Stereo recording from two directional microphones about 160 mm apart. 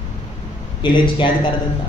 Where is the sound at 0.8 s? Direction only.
30° left (ahead or behind).